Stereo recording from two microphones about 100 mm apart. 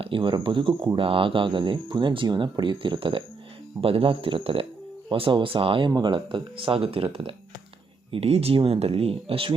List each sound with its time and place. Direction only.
0.0 s speech: 60° right (ahead or behind)
3.8 s speech: 70° right (ahead or behind)
8.1 s speech: 85° right